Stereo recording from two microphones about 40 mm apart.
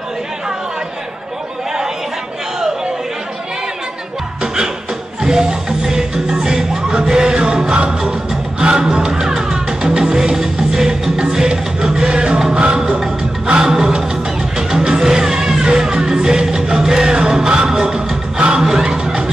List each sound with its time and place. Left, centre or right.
5.2 s music: centre
13.5 s music: centre